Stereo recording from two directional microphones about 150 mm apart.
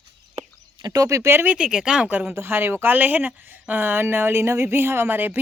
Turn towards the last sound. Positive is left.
turn(degrees=-15)  # may be behind; listen again after turning